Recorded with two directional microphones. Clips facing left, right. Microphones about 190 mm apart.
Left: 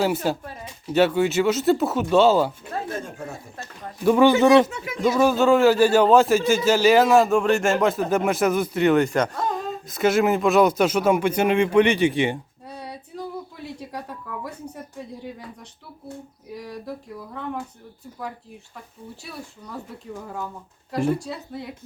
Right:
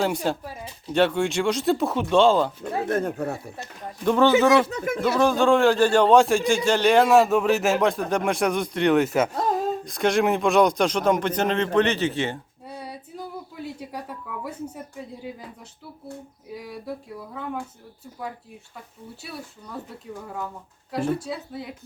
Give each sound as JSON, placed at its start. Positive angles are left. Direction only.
{"t": 0.0, "sound": "speech", "side_deg": 5}
{"t": 2.9, "sound": "speech", "side_deg": -60}
{"t": 4.0, "sound": "speech", "side_deg": 10}
{"t": 4.7, "sound": "speech", "side_deg": -50}
{"t": 5.0, "sound": "speech", "side_deg": 10}
{"t": 9.3, "sound": "speech", "side_deg": -35}
{"t": 9.6, "sound": "speech", "side_deg": 5}
{"t": 12.6, "sound": "female singing", "side_deg": 0}
{"t": 13.7, "sound": "a woman's voice", "side_deg": 0}
{"t": 16.6, "sound": "speech", "side_deg": -5}
{"t": 19.2, "sound": "speech", "side_deg": -5}